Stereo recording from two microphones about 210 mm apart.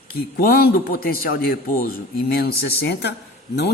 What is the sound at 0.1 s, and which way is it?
Speech, 45° left (ahead or behind).